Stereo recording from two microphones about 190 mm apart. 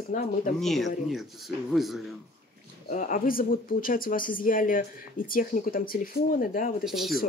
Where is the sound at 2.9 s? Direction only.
45° left (ahead or behind).